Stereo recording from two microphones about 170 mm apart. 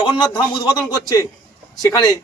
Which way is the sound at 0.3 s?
25° left (ahead or behind).